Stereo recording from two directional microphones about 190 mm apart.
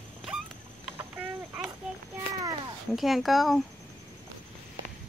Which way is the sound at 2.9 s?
Centre (ahead or behind).